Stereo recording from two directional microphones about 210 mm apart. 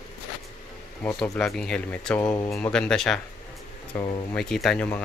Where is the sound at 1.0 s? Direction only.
5° left (ahead or behind).